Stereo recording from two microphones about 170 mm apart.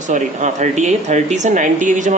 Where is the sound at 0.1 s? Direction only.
45° right (ahead or behind).